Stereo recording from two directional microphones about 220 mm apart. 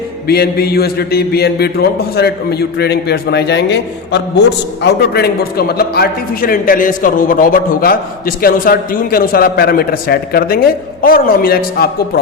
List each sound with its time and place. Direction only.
0.3 s a man's voice: 45° left (ahead or behind)